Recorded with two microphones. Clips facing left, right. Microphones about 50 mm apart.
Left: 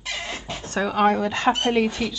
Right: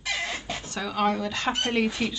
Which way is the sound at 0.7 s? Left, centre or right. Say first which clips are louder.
Left 6 dB; left.